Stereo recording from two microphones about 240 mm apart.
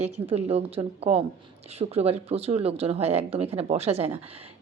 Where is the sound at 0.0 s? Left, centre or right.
Right.